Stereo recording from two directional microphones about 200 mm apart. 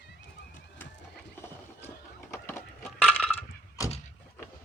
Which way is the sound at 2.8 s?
5° left (ahead or behind).